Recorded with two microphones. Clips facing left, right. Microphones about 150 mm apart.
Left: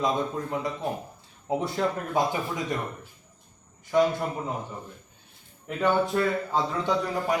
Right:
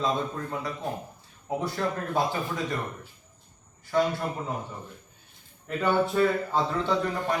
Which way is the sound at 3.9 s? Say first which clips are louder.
Left 3 dB; 15° left (ahead or behind).